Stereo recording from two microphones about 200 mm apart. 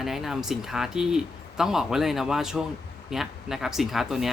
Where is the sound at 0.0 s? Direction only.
Centre (ahead or behind).